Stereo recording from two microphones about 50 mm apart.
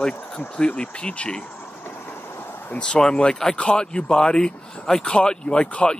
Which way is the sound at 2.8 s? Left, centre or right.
Centre.